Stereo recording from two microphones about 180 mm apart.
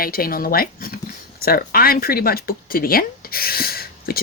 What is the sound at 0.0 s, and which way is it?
Speech, 55° left (ahead or behind).